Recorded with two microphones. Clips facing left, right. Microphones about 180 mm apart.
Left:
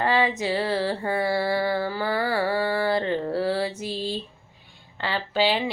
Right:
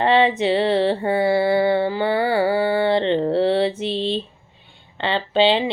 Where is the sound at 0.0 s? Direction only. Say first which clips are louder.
Right 6 dB; 25° right (ahead or behind).